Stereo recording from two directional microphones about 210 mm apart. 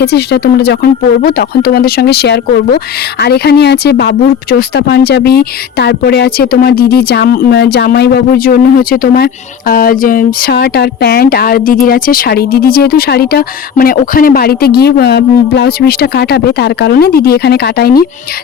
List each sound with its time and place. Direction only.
0.0 s speech: 50° left (ahead or behind)